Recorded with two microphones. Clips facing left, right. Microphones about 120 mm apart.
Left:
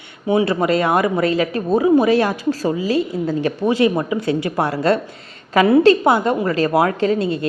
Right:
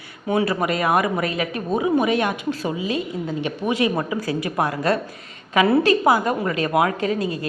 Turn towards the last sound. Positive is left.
turn(degrees=30)  # may be behind; listen again after turning